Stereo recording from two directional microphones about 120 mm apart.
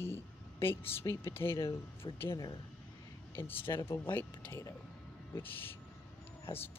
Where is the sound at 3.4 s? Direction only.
20° left (ahead or behind).